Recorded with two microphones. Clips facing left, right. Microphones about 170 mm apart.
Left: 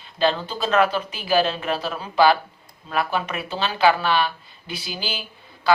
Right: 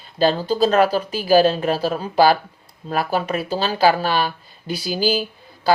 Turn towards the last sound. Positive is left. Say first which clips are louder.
# right 3 dB
turn(degrees=-40)  # may be behind; listen again after turning